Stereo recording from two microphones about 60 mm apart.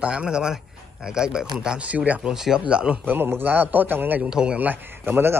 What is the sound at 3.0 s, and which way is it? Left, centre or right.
Speech, right.